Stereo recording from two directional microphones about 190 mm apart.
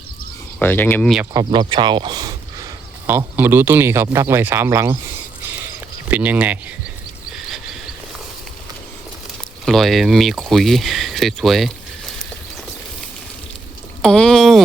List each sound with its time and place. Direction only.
0.6 s speech: 10° left (ahead or behind)
1.3 s speech: 20° right (ahead or behind)
3.1 s a man's voice: 10° right (ahead or behind)
6.1 s a man's voice: 10° right (ahead or behind)
7.3 s cricket: centre (ahead or behind)
9.6 s speech: centre (ahead or behind)
14.0 s a sound: 5° left (ahead or behind)